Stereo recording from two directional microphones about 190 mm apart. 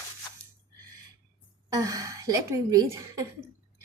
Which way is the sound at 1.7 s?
20° right (ahead or behind).